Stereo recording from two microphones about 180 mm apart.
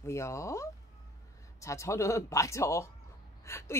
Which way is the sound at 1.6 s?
15° left (ahead or behind).